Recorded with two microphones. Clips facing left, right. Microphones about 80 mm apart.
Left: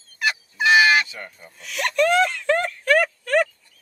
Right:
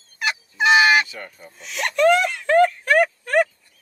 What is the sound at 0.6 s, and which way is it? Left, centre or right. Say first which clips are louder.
Fowl: right 1 dB; right.